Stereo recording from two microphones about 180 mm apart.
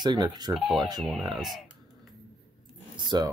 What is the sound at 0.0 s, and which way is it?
Speech, 25° right (ahead or behind).